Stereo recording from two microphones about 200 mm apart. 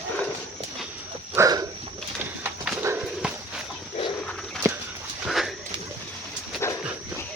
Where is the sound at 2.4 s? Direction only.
10° right (ahead or behind).